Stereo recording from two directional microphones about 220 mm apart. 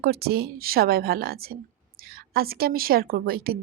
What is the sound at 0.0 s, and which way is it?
A woman's voice, 45° right (ahead or behind).